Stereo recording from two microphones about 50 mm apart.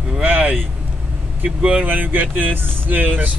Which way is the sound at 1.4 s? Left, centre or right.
Right.